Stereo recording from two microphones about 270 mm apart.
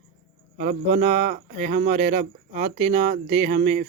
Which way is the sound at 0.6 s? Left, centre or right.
Right.